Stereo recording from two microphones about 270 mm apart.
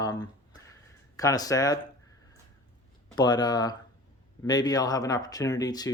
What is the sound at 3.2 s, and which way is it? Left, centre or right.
Speech, centre.